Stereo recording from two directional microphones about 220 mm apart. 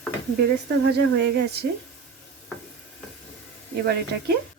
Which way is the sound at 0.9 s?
50° right (ahead or behind).